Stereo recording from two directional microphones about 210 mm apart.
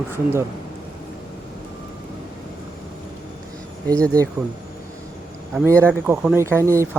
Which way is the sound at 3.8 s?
15° right (ahead or behind).